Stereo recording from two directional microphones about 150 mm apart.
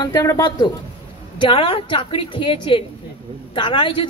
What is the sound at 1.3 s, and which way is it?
A woman's voice, 35° left (ahead or behind).